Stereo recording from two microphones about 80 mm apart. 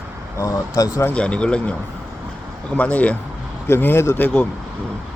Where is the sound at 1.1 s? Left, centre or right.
Centre.